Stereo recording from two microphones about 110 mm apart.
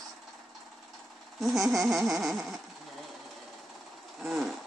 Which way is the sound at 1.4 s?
Centre (ahead or behind).